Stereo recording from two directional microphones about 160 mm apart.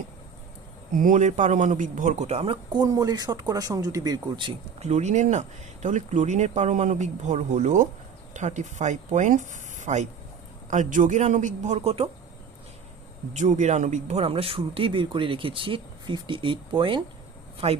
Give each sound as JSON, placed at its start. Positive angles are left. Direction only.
{"t": 0.9, "sound": "speech", "side_deg": -55}
{"t": 2.7, "sound": "speech", "side_deg": -25}
{"t": 4.8, "sound": "speech", "side_deg": -45}
{"t": 13.3, "sound": "speech", "side_deg": -50}